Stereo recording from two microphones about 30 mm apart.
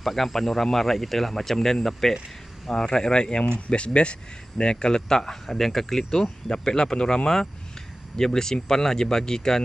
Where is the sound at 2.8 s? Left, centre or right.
Left.